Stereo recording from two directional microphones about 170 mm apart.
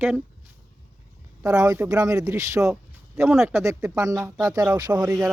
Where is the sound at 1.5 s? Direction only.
15° right (ahead or behind).